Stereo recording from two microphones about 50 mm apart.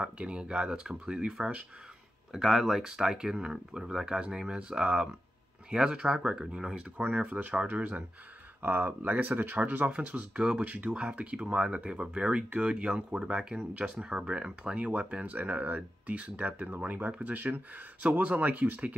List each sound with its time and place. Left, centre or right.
0.0 s speech: right
2.3 s speech: centre
7.0 s speech: right
8.6 s speech: right
15.3 s speech: right